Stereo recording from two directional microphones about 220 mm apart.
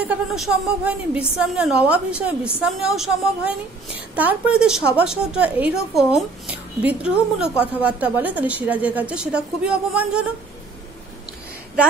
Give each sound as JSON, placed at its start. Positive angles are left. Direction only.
{"t": 0.0, "sound": "a woman's voice", "side_deg": -5}